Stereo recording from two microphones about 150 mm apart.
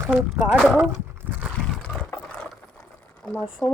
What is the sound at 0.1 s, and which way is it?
Speech, 5° right (ahead or behind).